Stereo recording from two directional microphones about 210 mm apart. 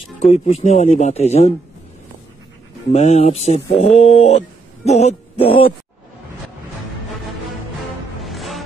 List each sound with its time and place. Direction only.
0.2 s speech: 30° left (ahead or behind)
2.9 s speech: 30° left (ahead or behind)
8.2 s music: centre (ahead or behind)